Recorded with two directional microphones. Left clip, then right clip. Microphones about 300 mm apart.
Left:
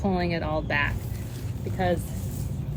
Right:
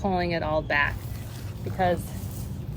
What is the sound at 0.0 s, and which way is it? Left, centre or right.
Speech, centre.